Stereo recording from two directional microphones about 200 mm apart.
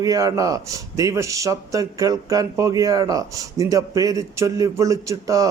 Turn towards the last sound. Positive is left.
turn(degrees=-15)  # may be behind; listen again after turning